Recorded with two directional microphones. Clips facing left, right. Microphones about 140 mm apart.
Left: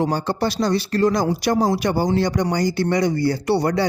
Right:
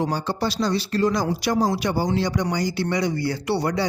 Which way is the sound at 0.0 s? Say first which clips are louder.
Left 3 dB; 50° left (ahead or behind).